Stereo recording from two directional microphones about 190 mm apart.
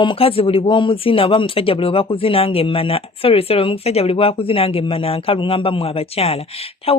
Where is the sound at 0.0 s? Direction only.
25° left (ahead or behind).